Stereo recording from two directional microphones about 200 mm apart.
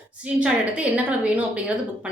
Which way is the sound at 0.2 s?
5° right (ahead or behind).